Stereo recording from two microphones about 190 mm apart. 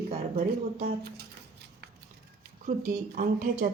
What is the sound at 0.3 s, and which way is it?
Speech, 50° right (ahead or behind).